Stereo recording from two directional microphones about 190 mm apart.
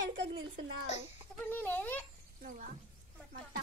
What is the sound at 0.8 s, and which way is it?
Speech, 35° left (ahead or behind).